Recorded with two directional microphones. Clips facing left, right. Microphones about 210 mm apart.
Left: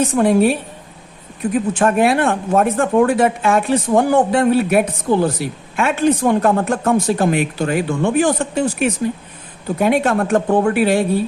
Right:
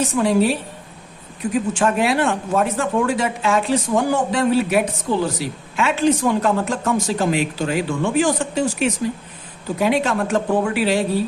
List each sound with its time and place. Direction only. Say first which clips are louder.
0.0 s speech: left 4 dB; 55° left (ahead or behind)
1.7 s speech: left 5 dB; 55° left (ahead or behind)